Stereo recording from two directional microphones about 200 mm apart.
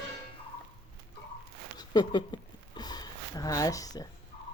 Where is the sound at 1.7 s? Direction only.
20° left (ahead or behind).